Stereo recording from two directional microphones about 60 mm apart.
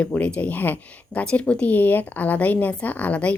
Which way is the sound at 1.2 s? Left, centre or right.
Centre.